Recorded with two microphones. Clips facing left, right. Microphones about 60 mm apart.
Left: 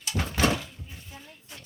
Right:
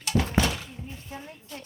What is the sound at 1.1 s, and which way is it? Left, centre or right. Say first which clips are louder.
Music: right 8 dB; right.